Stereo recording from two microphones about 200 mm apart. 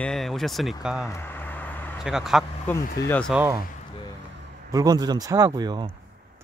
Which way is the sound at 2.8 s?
45° left (ahead or behind).